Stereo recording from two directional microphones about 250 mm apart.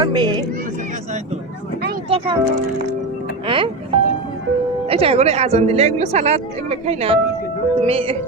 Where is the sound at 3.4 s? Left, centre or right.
Right.